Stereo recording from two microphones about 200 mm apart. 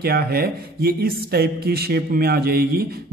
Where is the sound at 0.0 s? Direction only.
50° right (ahead or behind).